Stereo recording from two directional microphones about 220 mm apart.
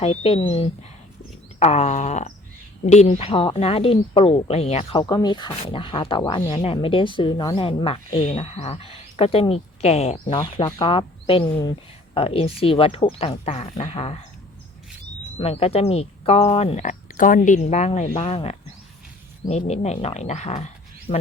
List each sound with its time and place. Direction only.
0.0 s speech: 25° left (ahead or behind)
10.4 s speech: 15° left (ahead or behind)
15.4 s speech: 25° left (ahead or behind)